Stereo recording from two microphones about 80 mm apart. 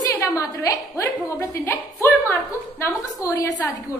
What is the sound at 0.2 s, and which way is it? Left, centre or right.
Speech, left.